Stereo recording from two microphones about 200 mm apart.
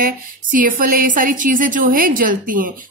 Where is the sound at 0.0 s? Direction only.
45° right (ahead or behind).